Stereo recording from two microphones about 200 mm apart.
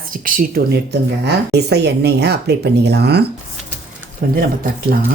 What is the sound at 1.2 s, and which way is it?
Speech, 55° right (ahead or behind).